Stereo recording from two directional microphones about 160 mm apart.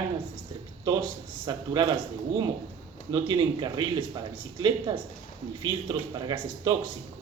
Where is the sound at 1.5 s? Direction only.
25° right (ahead or behind).